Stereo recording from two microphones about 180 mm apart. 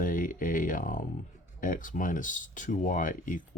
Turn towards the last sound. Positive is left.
turn(degrees=50)  # may be behind; listen again after turning